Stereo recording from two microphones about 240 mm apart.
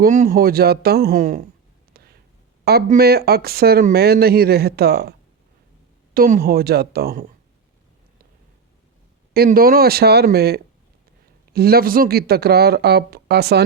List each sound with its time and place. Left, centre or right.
0.0 s speech: right
2.6 s speech: right
6.1 s speech: right
9.3 s speech: right